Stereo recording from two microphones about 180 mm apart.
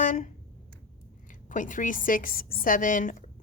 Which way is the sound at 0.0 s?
45° left (ahead or behind).